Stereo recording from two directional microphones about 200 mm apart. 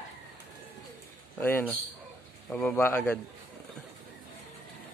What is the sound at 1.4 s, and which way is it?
A man's voice, 10° left (ahead or behind).